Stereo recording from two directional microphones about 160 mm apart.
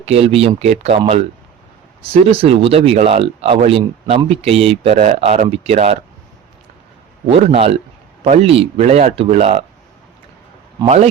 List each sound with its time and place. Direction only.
0.0 s speech: 40° right (ahead or behind)
7.3 s speech: 40° right (ahead or behind)
10.8 s a man's voice: 45° right (ahead or behind)